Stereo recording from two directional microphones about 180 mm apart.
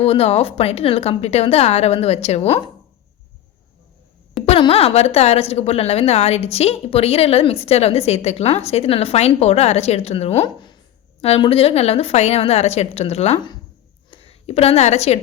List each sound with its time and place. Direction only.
0.0 s speech: 35° left (ahead or behind)
4.4 s speech: 30° left (ahead or behind)
10.4 s a woman's voice: 25° left (ahead or behind)